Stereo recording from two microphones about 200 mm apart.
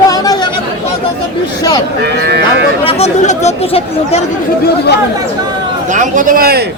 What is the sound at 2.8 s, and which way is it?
Speech, 35° left (ahead or behind).